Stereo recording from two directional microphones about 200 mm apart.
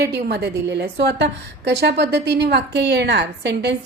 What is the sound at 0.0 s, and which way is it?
A woman's voice, 55° right (ahead or behind).